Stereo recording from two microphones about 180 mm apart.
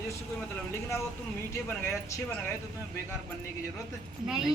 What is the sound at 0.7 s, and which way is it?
Speech, 15° left (ahead or behind).